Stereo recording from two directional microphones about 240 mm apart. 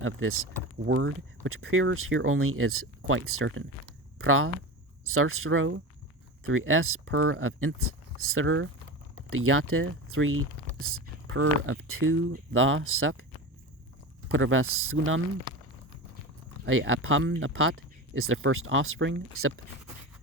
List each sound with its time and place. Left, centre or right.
0.0 s speech: right
14.3 s speech: right
16.6 s speech: right